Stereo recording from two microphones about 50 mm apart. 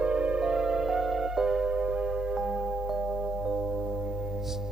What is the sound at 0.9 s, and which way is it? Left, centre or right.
Music, centre.